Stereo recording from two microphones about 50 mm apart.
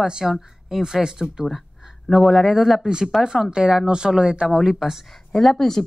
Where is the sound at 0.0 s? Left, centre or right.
Centre.